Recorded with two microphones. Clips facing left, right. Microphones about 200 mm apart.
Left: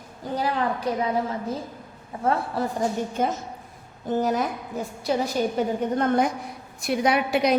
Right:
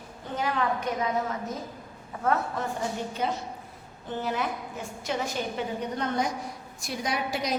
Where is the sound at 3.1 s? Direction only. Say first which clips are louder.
Left 4 dB; 45° left (ahead or behind); by 7.6 s 60° left (ahead or behind).